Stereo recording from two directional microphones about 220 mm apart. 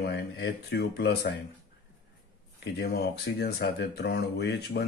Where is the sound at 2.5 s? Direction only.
50° left (ahead or behind).